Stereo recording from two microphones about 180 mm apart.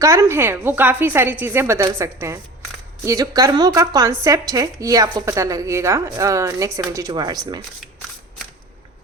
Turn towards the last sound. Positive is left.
turn(degrees=-20)  # may be behind; listen again after turning